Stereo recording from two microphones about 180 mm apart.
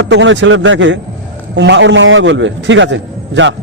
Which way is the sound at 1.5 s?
80° right.